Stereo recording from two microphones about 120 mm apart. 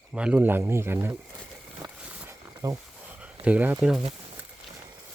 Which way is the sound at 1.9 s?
10° right (ahead or behind).